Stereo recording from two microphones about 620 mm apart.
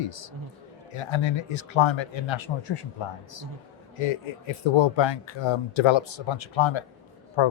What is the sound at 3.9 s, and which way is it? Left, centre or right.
A man's voice, left.